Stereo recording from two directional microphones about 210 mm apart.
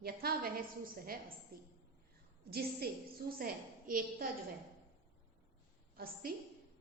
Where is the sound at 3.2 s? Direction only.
50° right (ahead or behind).